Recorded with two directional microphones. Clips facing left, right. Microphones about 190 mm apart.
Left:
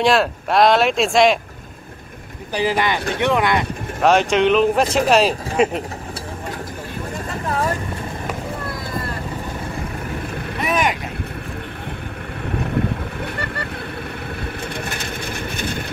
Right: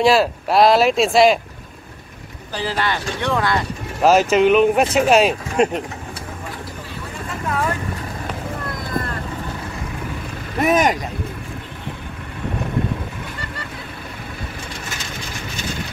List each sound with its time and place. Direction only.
0.0 s speech: centre (ahead or behind)
2.5 s speech: 15° left (ahead or behind)
4.0 s speech: 5° right (ahead or behind)
7.2 s vehicle: 35° left (ahead or behind)
10.6 s speech: 45° right (ahead or behind)
13.2 s vehicle: 65° left (ahead or behind)
15.5 s vehicle: 55° left (ahead or behind)